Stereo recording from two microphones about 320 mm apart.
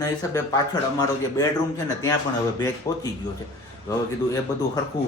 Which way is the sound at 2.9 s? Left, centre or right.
Centre.